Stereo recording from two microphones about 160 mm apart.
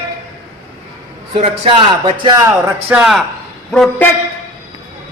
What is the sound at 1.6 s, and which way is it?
Speech, 35° right (ahead or behind).